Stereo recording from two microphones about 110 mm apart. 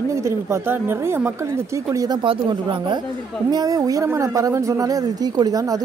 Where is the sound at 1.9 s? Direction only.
30° right (ahead or behind).